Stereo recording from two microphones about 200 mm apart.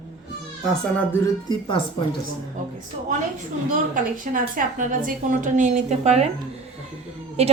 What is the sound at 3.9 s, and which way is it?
A woman's voice, 40° right (ahead or behind).